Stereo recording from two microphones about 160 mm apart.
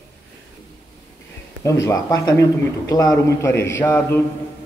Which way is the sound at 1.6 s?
20° left (ahead or behind).